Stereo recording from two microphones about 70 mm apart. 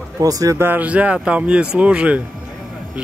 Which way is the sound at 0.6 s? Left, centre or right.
Right.